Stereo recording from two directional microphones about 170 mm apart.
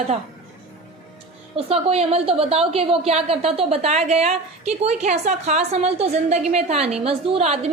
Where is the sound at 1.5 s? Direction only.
35° right (ahead or behind).